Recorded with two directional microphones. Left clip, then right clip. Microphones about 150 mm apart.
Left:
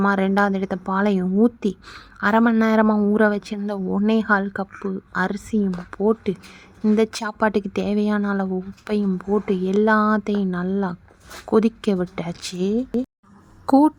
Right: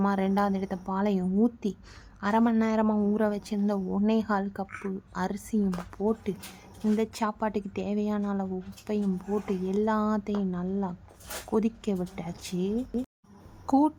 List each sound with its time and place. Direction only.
0.0 s speech: 25° left (ahead or behind)